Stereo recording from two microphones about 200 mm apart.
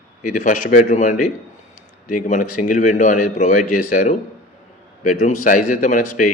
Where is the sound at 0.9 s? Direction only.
35° left (ahead or behind).